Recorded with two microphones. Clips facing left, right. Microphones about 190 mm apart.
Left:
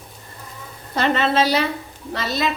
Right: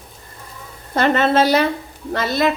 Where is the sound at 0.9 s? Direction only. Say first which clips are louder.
Right 3 dB; 50° right (ahead or behind).